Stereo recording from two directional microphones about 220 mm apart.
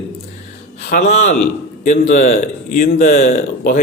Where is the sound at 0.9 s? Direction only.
35° left (ahead or behind).